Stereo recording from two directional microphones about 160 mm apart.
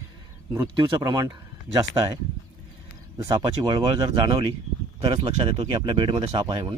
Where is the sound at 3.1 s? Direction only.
25° right (ahead or behind).